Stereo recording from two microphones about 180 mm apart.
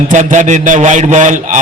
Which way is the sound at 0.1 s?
45° right (ahead or behind).